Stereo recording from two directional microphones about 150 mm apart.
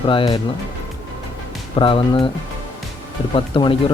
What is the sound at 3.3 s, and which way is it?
Speech, 35° left (ahead or behind).